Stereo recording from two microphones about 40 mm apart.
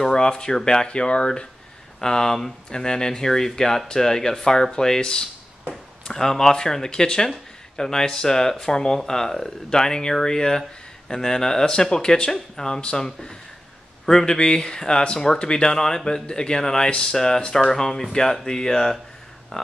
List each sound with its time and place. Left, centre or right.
0.0 s speech: centre